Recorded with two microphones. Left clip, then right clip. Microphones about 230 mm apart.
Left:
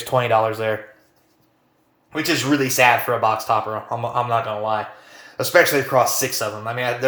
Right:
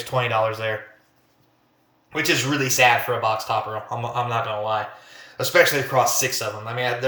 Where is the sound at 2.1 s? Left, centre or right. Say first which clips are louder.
Left 1 dB; centre.